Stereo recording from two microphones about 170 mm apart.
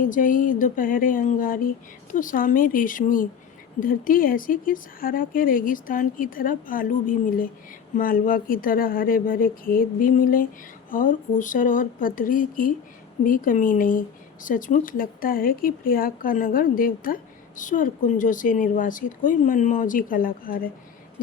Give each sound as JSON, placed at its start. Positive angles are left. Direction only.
{"t": 0.0, "sound": "speech", "side_deg": 50}